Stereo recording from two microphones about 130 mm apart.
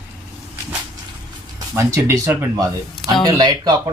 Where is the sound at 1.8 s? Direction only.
20° right (ahead or behind).